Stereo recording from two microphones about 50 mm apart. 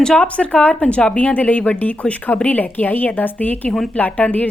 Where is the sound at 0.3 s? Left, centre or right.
Left.